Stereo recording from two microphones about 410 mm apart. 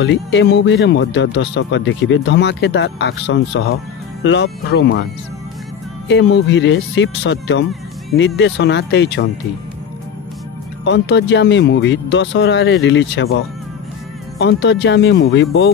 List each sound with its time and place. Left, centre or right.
0.0 s speech: left
6.0 s speech: left
10.8 s speech: left
14.4 s speech: left